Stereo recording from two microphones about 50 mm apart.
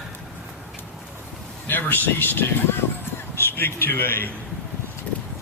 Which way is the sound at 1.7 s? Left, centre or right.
Left.